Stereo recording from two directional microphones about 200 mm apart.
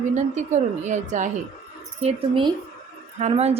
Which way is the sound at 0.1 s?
35° right (ahead or behind).